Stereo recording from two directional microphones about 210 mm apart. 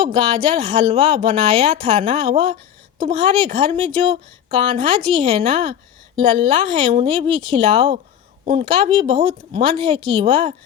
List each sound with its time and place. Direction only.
0.0 s speech: 20° right (ahead or behind)